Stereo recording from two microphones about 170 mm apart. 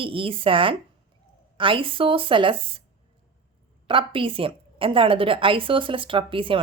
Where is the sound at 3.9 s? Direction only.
30° right (ahead or behind).